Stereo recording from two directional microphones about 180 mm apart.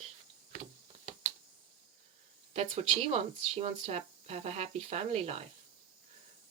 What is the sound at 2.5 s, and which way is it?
Speech, 35° right (ahead or behind).